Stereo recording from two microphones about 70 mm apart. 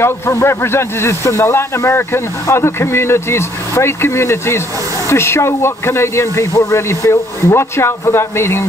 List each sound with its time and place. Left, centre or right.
0.0 s speech: left